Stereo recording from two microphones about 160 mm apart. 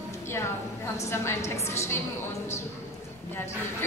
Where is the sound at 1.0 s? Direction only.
15° left (ahead or behind).